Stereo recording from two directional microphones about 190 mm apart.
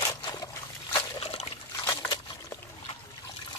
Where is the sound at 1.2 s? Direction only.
30° left (ahead or behind).